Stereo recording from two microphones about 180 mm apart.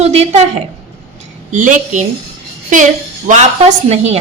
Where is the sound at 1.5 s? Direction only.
45° right (ahead or behind).